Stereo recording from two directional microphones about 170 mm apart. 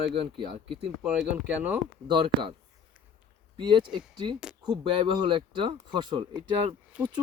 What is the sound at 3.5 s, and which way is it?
Speech, 25° right (ahead or behind).